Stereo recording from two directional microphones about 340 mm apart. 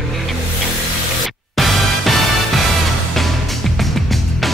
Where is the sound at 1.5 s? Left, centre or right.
Centre.